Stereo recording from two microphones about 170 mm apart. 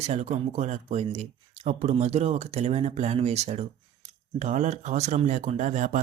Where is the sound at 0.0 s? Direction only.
40° right (ahead or behind).